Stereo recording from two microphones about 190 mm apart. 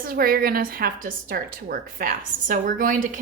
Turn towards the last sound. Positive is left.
turn(degrees=-45)  # may be behind; listen again after turning